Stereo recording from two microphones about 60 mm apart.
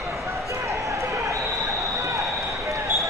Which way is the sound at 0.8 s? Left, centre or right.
Right.